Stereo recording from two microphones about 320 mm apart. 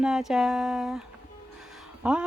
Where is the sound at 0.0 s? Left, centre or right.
Centre.